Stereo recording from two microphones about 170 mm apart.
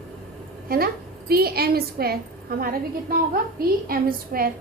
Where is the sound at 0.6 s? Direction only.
60° right (ahead or behind).